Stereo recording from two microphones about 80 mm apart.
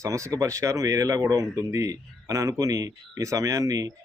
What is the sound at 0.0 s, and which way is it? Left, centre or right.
Speech, right.